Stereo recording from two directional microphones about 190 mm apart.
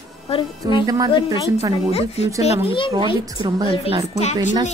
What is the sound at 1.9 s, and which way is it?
Speech, 30° left (ahead or behind).